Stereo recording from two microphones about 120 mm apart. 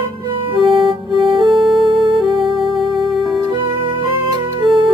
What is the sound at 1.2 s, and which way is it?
Music, 45° right (ahead or behind).